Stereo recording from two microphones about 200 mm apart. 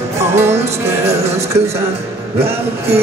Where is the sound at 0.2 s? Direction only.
10° right (ahead or behind).